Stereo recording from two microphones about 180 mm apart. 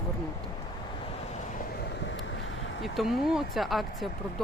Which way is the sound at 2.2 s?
90° left.